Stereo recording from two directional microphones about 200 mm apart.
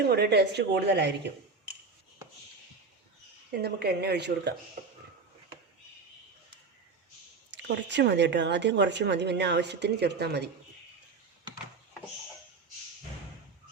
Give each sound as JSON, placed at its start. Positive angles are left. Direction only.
{"t": 0.0, "sound": "speech", "side_deg": -55}
{"t": 3.5, "sound": "speech", "side_deg": -55}
{"t": 7.5, "sound": "speech", "side_deg": -60}